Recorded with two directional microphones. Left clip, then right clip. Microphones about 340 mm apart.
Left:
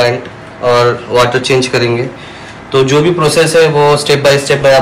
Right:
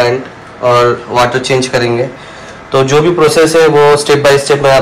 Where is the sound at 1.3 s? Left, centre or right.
Centre.